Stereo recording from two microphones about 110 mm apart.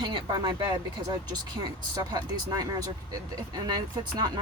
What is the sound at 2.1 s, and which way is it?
Speech, 35° right (ahead or behind).